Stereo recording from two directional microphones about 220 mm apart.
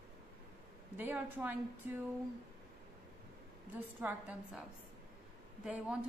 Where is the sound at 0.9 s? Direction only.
10° right (ahead or behind).